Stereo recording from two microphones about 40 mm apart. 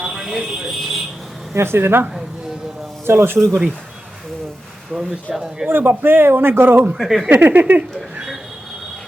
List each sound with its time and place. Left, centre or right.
0.0 s vehicle: centre
1.5 s speech: right
3.1 s speech: right
4.9 s speech: centre
5.6 s a man's voice: right
6.9 s speech: centre
7.3 s speech: right